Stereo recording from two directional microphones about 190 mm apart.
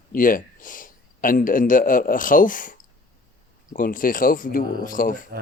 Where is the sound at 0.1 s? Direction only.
45° left (ahead or behind).